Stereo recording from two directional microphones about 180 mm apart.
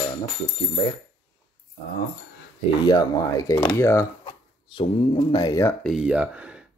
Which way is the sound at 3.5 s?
30° left (ahead or behind).